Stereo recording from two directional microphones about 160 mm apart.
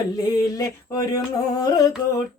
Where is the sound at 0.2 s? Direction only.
20° left (ahead or behind).